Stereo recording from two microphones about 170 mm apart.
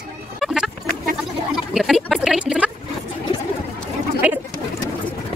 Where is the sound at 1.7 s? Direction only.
Centre (ahead or behind).